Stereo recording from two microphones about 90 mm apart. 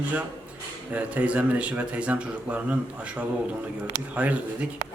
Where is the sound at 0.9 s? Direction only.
15° right (ahead or behind).